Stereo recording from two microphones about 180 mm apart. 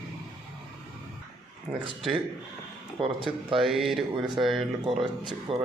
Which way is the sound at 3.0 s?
30° right (ahead or behind).